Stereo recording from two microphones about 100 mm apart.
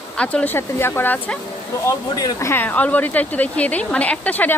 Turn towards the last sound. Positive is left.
turn(degrees=15)  # may be behind; listen again after turning